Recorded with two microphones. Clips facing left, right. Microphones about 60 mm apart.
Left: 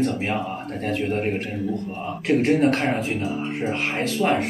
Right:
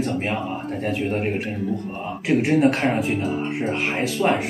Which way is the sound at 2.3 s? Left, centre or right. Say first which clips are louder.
Right 1 dB; centre.